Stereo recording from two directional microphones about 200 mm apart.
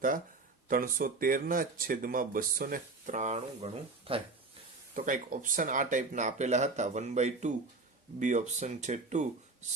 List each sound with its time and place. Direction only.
0.7 s speech: 45° right (ahead or behind)
4.9 s speech: 40° right (ahead or behind)